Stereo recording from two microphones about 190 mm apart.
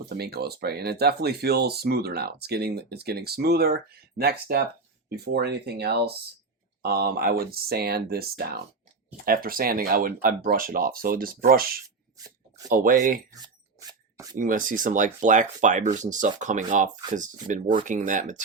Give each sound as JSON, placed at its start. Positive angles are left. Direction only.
{"t": 0.0, "sound": "speech", "side_deg": -55}
{"t": 13.3, "sound": "a sound", "side_deg": -20}
{"t": 14.3, "sound": "speech", "side_deg": -45}